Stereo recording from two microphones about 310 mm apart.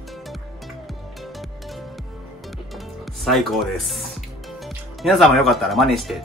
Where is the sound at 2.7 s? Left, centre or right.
Centre.